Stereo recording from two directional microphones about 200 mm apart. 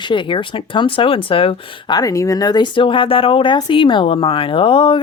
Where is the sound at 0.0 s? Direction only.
25° left (ahead or behind).